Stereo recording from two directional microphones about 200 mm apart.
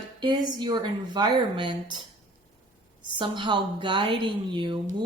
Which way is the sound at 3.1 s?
25° right (ahead or behind).